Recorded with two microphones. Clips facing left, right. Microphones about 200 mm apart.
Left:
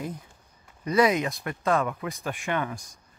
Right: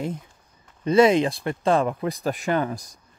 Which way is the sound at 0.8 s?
25° right (ahead or behind).